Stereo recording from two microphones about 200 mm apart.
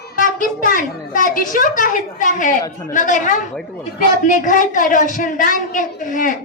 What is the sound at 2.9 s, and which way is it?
A woman's voice, 40° left (ahead or behind).